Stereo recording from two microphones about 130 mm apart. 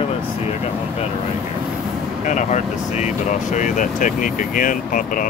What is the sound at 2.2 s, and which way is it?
Speech, 70° left (ahead or behind).